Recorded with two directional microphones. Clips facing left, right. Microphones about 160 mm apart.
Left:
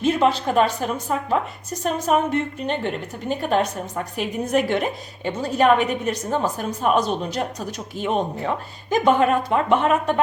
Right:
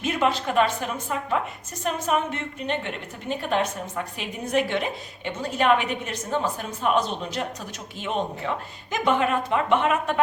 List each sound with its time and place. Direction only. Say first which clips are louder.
0.0 s a woman's voice: left 5 dB; 30° left (ahead or behind)